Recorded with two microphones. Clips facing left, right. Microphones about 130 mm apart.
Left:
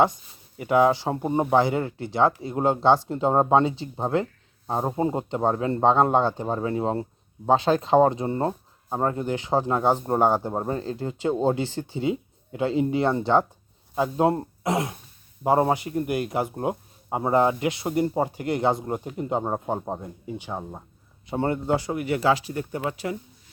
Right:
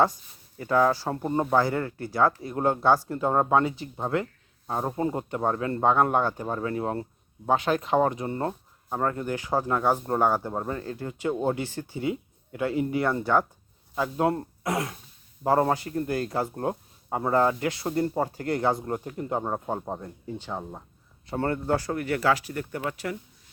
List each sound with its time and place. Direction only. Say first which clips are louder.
0.5 s speech: left 3 dB; 20° left (ahead or behind)